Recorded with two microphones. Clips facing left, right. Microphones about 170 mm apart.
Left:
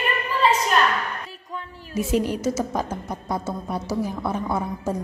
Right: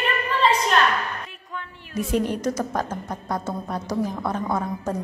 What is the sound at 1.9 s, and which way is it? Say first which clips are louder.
A woman's voice: left 1 dB; 10° left (ahead or behind).